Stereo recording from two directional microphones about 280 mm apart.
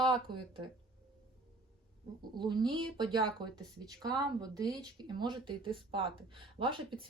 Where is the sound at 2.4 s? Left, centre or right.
Centre.